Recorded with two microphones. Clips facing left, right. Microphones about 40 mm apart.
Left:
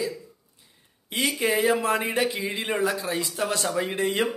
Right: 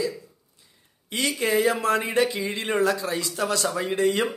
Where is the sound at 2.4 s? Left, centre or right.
Centre; by 3.6 s left.